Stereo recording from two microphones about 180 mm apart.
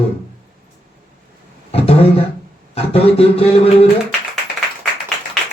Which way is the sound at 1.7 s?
35° left (ahead or behind).